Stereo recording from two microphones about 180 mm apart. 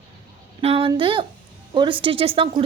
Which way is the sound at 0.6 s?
30° right (ahead or behind).